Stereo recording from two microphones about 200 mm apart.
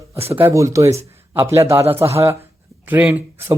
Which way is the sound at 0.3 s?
15° right (ahead or behind).